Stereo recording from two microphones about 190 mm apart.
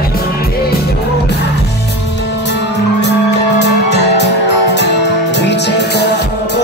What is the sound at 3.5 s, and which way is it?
Music, 65° left (ahead or behind).